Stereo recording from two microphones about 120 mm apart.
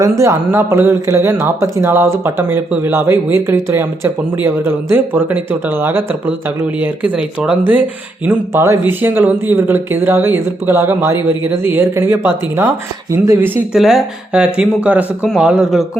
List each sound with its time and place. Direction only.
0.0 s speech: 25° right (ahead or behind)
13.7 s a man's voice: centre (ahead or behind)